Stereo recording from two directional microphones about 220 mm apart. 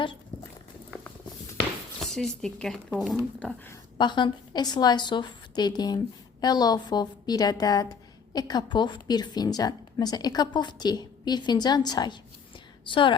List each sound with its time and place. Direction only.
2.0 s speech: centre (ahead or behind)
3.7 s a woman's voice: 20° left (ahead or behind)